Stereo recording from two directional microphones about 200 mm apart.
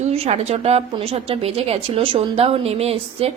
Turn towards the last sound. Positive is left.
turn(degrees=-30)  # may be behind; listen again after turning